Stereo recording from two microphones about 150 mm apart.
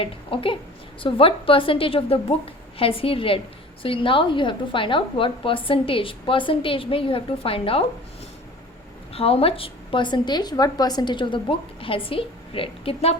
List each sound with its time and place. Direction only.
0.0 s a woman's voice: 35° left (ahead or behind)
9.1 s a woman's voice: 40° left (ahead or behind)